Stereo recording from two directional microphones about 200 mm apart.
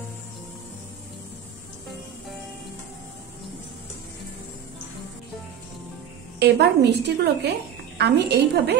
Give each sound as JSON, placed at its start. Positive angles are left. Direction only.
{"t": 6.4, "sound": "a woman's voice", "side_deg": -55}